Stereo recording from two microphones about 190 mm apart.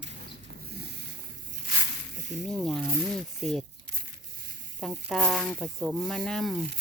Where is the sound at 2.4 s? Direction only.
Centre (ahead or behind).